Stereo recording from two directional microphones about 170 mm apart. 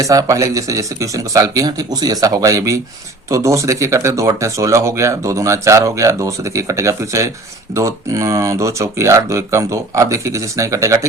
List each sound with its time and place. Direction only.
0.0 s speech: 20° right (ahead or behind)